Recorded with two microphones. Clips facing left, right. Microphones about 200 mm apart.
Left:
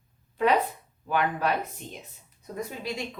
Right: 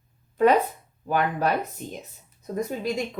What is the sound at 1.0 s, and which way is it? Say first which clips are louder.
Speech: right 2 dB; 40° right (ahead or behind).